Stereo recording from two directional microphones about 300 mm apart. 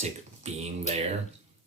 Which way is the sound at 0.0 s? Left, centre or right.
Right.